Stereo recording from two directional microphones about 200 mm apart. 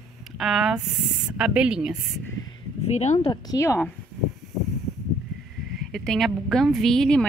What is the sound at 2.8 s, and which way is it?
Speech, 35° left (ahead or behind).